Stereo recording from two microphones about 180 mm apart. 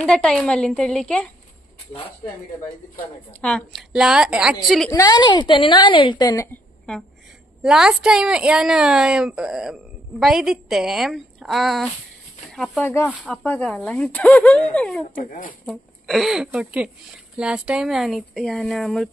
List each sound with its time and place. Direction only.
0.0 s a woman's voice: 5° left (ahead or behind)
3.3 s a woman's voice: 5° left (ahead or behind)
4.9 s speech: 25° left (ahead or behind)
7.6 s a woman's voice: 5° right (ahead or behind)
13.1 s a woman's voice: centre (ahead or behind)
15.1 s speech: 50° left (ahead or behind)
15.6 s a woman's voice: centre (ahead or behind)